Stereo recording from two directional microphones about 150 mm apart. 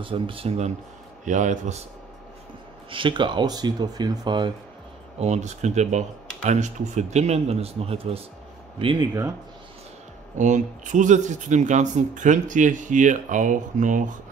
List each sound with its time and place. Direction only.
0.0 s speech: 35° right (ahead or behind)
1.2 s speech: 55° right (ahead or behind)
2.9 s speech: 35° right (ahead or behind)
5.2 s speech: 50° right (ahead or behind)
10.3 s speech: 55° right (ahead or behind)